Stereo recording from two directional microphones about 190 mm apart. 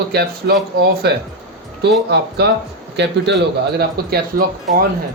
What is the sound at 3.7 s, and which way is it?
Speech, 55° right (ahead or behind).